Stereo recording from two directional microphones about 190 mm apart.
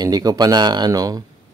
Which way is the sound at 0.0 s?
20° right (ahead or behind).